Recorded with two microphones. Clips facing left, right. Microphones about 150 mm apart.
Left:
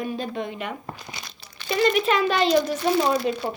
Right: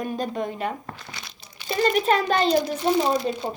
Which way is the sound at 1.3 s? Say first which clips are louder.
Left 1 dB; 15° right (ahead or behind).